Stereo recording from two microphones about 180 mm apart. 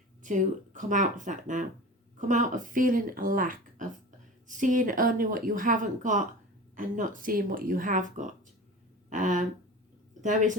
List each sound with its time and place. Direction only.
0.2 s speech: 45° right (ahead or behind)